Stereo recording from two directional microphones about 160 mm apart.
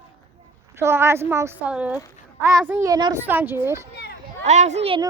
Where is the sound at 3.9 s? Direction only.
85° left.